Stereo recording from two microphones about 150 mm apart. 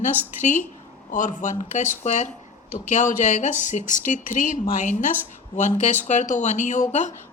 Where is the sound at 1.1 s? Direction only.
55° left (ahead or behind).